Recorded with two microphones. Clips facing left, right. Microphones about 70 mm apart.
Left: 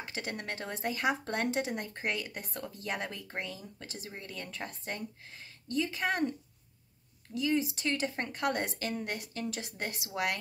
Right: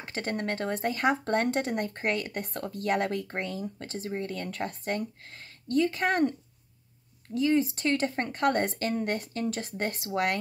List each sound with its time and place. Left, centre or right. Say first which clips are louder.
0.0 s speech: right 6 dB; right
7.3 s speech: right 6 dB; right